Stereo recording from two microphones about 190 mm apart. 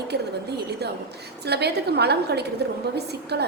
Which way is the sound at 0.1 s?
60° right (ahead or behind).